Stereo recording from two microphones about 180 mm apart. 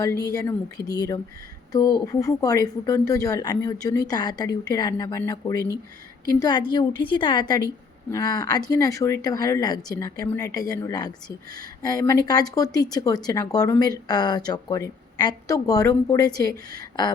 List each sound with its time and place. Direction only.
0.0 s a woman's voice: 20° left (ahead or behind)